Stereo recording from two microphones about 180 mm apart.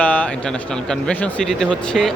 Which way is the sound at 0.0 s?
10° left (ahead or behind).